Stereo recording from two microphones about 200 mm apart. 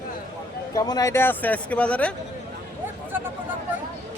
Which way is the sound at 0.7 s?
20° left (ahead or behind).